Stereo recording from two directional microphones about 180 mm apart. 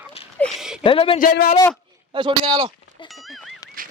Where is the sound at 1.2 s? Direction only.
50° left (ahead or behind).